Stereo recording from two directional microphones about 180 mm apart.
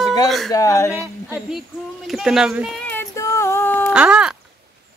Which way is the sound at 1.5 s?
Centre (ahead or behind).